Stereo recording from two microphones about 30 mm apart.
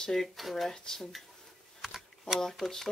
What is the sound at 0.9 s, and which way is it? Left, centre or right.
Speech, left.